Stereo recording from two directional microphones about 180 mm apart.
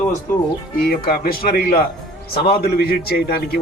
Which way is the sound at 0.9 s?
60° left (ahead or behind).